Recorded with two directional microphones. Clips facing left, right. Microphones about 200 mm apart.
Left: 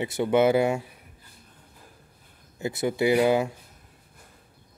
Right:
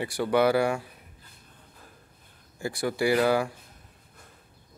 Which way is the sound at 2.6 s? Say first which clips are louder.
Left 2 dB; 20° left (ahead or behind).